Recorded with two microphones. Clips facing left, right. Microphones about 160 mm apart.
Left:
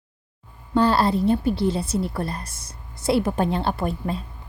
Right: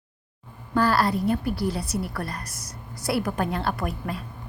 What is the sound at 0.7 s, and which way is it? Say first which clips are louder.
A woman's voice: left 3 dB; 25° left (ahead or behind).